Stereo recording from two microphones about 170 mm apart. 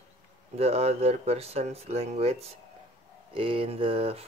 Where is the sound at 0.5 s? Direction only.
40° right (ahead or behind).